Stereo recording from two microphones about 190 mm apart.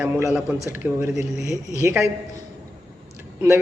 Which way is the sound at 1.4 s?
35° left (ahead or behind).